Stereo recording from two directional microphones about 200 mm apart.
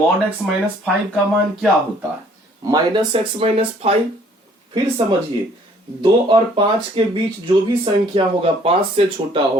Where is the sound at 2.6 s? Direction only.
20° right (ahead or behind).